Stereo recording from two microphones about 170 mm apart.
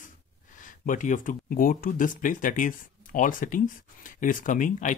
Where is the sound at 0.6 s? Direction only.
50° left (ahead or behind).